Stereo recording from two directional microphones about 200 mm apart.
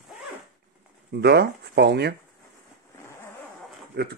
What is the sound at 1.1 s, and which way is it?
Speech, 55° right (ahead or behind).